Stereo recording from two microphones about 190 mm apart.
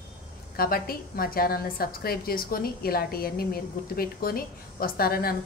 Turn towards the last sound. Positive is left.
turn(degrees=50)  # may be behind; listen again after turning